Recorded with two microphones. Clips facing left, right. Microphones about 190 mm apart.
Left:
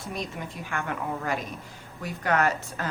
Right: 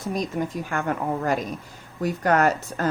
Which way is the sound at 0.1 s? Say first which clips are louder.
Right 9 dB; 40° right (ahead or behind).